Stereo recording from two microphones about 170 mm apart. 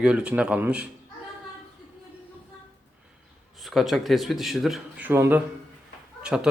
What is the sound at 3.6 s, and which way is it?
A man's voice, centre (ahead or behind).